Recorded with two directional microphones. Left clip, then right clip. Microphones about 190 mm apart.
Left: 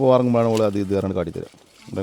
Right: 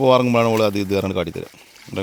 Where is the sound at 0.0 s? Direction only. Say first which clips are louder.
Right 2 dB; 10° left (ahead or behind).